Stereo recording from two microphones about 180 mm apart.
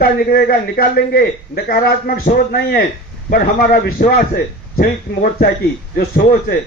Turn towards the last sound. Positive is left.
turn(degrees=55)  # may be behind; listen again after turning